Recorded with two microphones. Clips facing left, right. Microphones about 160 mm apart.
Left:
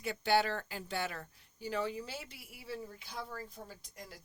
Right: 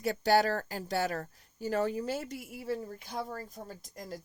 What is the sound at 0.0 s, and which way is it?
Speech, 40° right (ahead or behind).